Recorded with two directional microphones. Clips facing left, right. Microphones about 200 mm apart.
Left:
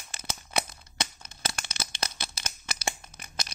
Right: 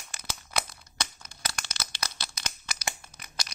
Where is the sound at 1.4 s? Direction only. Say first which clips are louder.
Left 2 dB; 25° left (ahead or behind).